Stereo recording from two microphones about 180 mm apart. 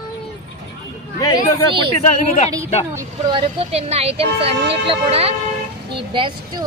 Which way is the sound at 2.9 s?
25° right (ahead or behind).